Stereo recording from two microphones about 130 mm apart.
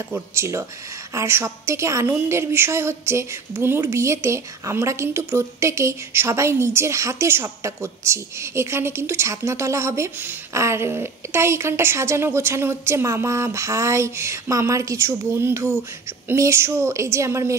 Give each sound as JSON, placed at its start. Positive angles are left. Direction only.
{"t": 0.1, "sound": "a woman's voice", "side_deg": -20}